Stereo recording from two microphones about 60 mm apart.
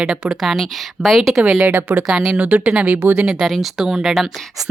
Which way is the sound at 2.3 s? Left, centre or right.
Right.